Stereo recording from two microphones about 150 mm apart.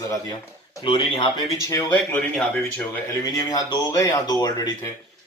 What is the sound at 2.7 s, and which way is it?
Speech, 10° left (ahead or behind).